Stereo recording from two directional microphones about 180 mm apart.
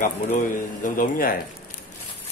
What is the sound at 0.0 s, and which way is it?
Speech, 45° left (ahead or behind).